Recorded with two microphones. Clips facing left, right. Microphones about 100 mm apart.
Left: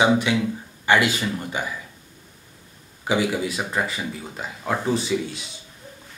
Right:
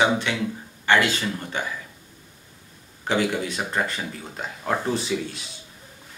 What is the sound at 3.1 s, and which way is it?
Speech, 5° left (ahead or behind).